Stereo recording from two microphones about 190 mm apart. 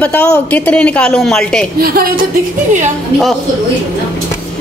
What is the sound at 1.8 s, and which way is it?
Speech, 55° right (ahead or behind).